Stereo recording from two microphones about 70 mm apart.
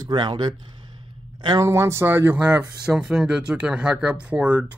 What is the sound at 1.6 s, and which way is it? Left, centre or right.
Speech, right.